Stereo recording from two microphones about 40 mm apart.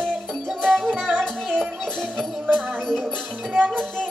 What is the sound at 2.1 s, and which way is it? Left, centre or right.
Music, right.